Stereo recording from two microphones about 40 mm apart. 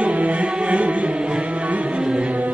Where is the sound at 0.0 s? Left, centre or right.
Right.